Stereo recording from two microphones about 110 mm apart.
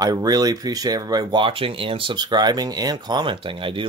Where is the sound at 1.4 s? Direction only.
55° right (ahead or behind).